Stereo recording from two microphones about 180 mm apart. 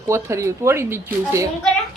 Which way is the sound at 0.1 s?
15° right (ahead or behind).